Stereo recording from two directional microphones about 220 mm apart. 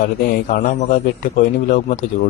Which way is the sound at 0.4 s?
35° left (ahead or behind).